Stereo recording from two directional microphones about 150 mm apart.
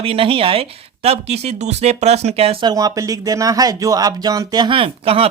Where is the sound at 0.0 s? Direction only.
40° right (ahead or behind).